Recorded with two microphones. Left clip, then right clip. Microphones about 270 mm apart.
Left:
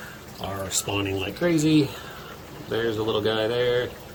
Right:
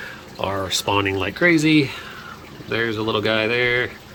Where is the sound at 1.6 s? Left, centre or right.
Centre.